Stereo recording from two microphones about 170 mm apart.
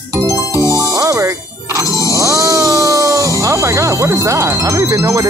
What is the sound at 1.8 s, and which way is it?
Music, 20° left (ahead or behind).